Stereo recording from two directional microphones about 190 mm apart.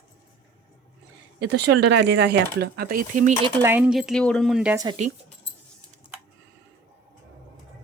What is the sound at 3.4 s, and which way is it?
A woman's voice, 15° right (ahead or behind).